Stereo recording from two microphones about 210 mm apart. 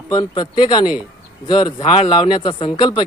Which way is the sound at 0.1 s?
20° left (ahead or behind).